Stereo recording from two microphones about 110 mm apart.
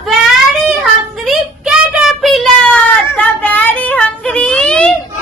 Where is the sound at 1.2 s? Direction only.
5° right (ahead or behind).